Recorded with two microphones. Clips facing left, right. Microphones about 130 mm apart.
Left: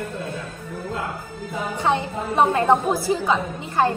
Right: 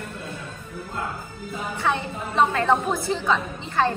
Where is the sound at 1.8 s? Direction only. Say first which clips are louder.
Left 3 dB; 15° left (ahead or behind).